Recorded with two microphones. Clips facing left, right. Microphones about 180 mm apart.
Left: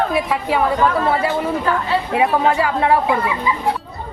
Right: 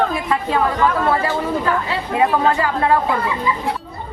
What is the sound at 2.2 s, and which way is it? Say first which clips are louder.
Speech: right 1 dB; 10° left (ahead or behind).